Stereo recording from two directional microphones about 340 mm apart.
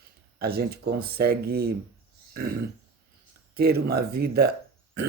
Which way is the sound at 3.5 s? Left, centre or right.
Right.